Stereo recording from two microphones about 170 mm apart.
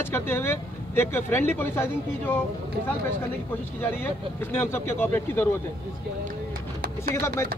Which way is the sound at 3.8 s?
15° left (ahead or behind).